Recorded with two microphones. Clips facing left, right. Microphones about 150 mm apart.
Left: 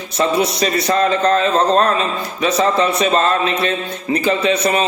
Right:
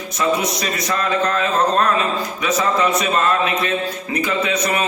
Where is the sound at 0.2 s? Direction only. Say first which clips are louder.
Left 4 dB; 30° left (ahead or behind).